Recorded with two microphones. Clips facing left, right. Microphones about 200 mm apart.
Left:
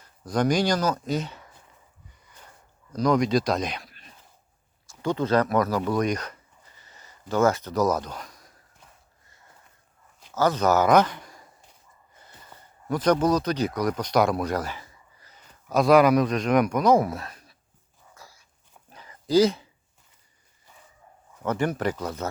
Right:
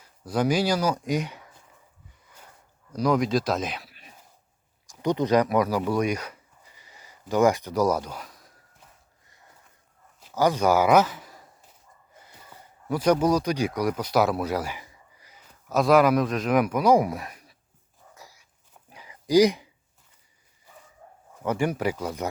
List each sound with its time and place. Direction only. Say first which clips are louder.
0.0 s speech: left 1 dB; 5° right (ahead or behind)
2.9 s speech: left 1 dB; 5° right (ahead or behind)
10.3 s speech: even; 10° right (ahead or behind)
12.9 s speech: even; 10° right (ahead or behind)
18.1 s dog: right 1 dB; 15° right (ahead or behind)
18.7 s a sound: even; 10° right (ahead or behind)
21.4 s speech: even; 10° right (ahead or behind)